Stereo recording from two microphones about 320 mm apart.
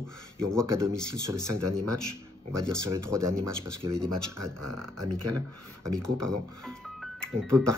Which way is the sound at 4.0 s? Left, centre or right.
Centre.